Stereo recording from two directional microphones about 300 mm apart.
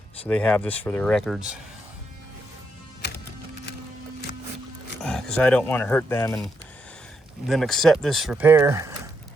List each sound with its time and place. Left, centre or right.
0.3 s speech: centre
3.0 s music: left
5.0 s speech: centre